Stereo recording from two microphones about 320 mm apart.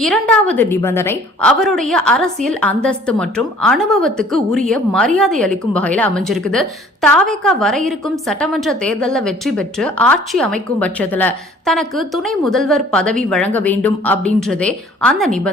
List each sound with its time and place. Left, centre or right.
0.0 s a woman's voice: centre